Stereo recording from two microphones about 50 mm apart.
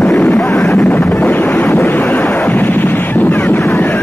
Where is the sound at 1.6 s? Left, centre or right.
Left.